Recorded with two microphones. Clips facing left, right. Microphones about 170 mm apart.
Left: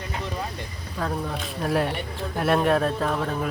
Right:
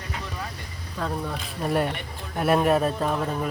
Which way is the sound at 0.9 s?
Centre (ahead or behind).